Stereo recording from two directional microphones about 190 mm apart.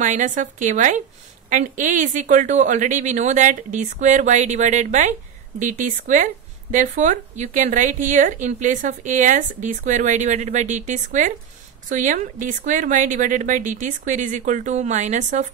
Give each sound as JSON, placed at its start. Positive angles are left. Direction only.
{"t": 0.0, "sound": "a woman's voice", "side_deg": -40}